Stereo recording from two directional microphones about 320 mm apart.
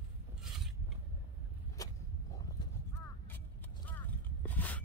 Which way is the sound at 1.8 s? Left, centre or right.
Centre.